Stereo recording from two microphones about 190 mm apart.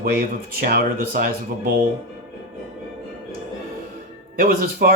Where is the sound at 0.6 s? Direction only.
50° right (ahead or behind).